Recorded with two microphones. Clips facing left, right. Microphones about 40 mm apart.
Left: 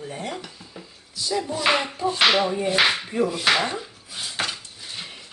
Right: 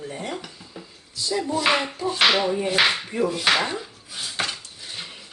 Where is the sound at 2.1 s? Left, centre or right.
Centre.